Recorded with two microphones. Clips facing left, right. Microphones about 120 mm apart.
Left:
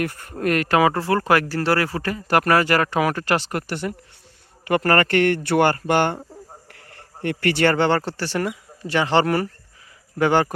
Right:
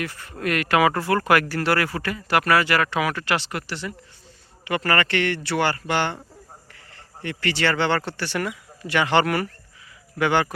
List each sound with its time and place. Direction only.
0.0 s speech: 50° left (ahead or behind)